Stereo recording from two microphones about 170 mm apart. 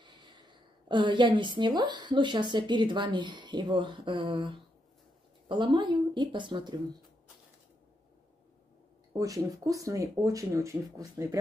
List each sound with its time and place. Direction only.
0.0 s a woman's voice: 25° right (ahead or behind)
9.1 s speech: 20° right (ahead or behind)